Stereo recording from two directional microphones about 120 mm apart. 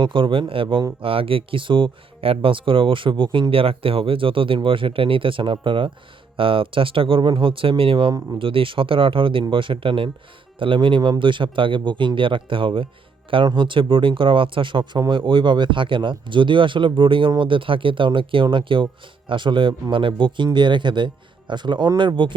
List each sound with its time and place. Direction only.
0.0 s speech: 45° right (ahead or behind)